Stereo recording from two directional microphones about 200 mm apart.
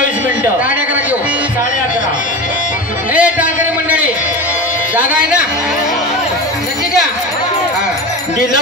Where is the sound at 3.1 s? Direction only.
5° right (ahead or behind).